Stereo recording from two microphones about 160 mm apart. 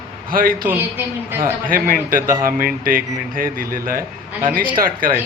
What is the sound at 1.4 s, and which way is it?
Speech, 60° right (ahead or behind).